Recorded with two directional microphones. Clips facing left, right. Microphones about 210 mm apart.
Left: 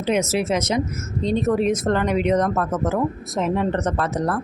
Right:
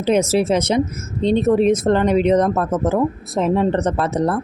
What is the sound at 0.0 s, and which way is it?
Speech, 30° right (ahead or behind).